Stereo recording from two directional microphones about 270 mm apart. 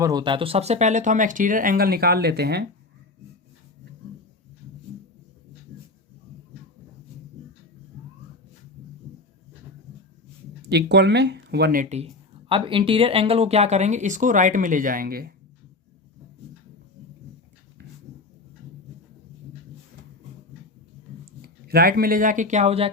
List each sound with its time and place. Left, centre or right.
0.0 s speech: centre; by 2.6 s right
10.7 s speech: right
21.4 s speech: right